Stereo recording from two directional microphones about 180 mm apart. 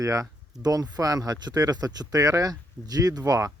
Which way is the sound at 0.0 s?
20° right (ahead or behind).